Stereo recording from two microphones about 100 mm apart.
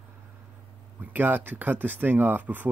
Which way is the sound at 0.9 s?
20° right (ahead or behind).